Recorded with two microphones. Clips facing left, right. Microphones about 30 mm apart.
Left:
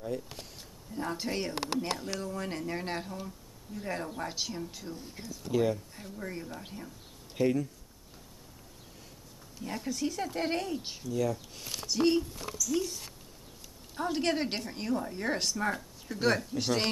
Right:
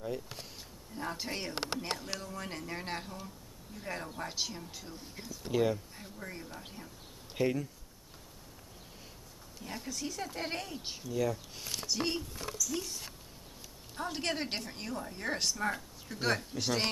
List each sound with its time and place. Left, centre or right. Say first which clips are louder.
0.0 s speech: left 2 dB; centre
1.5 s speech: left 3 dB; centre
2.1 s speech: left 5 dB; centre
9.6 s speech: left 6 dB; centre